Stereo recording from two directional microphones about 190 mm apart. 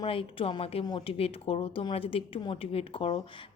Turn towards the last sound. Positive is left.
turn(degrees=30)  # may be behind; listen again after turning